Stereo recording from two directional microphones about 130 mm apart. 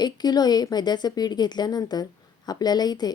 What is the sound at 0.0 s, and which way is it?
A woman's voice, 30° left (ahead or behind).